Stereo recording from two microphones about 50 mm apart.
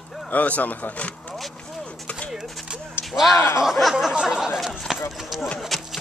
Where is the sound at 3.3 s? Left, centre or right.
Left.